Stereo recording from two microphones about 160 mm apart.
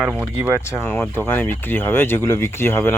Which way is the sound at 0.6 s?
15° left (ahead or behind).